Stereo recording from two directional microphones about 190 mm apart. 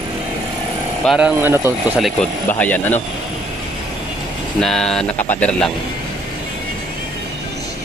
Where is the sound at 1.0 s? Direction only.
5° right (ahead or behind).